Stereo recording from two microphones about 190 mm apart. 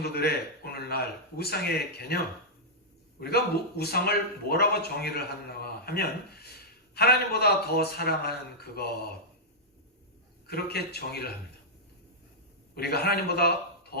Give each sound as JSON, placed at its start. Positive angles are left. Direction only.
{"t": 0.0, "sound": "speech", "side_deg": 55}
{"t": 10.4, "sound": "speech", "side_deg": 55}
{"t": 12.7, "sound": "speech", "side_deg": 55}